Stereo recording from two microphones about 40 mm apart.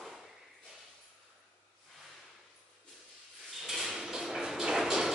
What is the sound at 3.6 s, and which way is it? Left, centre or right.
Sliding door, centre.